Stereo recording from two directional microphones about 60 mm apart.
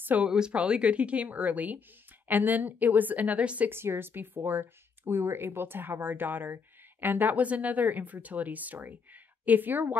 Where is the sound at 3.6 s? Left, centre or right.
Right.